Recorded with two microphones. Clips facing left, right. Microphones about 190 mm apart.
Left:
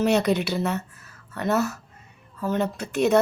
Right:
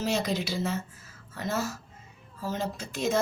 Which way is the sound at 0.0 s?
65° left (ahead or behind).